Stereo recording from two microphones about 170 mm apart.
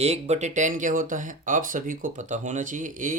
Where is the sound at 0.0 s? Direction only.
40° right (ahead or behind).